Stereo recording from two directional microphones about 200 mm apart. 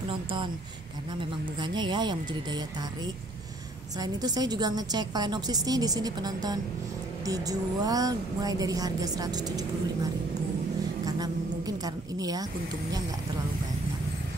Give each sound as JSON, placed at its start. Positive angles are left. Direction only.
{"t": 1.6, "sound": "a woman's voice", "side_deg": -20}
{"t": 4.0, "sound": "a woman's voice", "side_deg": -20}
{"t": 11.1, "sound": "a sound", "side_deg": -20}